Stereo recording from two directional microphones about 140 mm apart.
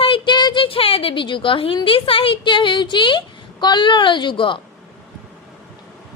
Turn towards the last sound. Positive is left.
turn(degrees=35)  # may be behind; listen again after turning